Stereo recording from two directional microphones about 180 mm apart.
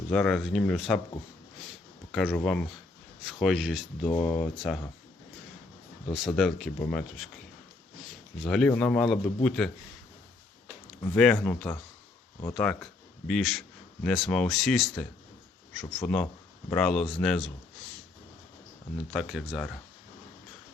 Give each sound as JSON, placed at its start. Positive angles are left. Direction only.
{"t": 0.1, "sound": "speech", "side_deg": 5}
{"t": 2.1, "sound": "speech", "side_deg": 0}
{"t": 4.0, "sound": "speech", "side_deg": 30}
{"t": 4.4, "sound": "speech", "side_deg": 0}
{"t": 6.2, "sound": "a man's voice", "side_deg": 0}
{"t": 11.0, "sound": "speech", "side_deg": 5}
{"t": 16.0, "sound": "speech", "side_deg": 10}
{"t": 19.1, "sound": "speech", "side_deg": 0}